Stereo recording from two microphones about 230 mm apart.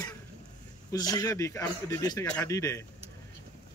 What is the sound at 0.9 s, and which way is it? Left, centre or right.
A man's voice, centre.